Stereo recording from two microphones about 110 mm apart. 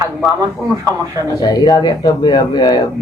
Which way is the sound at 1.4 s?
35° left (ahead or behind).